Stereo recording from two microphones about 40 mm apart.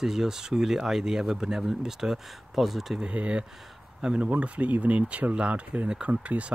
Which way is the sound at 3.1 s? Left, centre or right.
Right.